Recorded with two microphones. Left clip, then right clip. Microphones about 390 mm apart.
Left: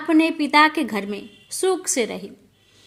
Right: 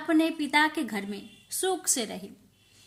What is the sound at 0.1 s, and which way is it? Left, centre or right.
A woman's voice, right.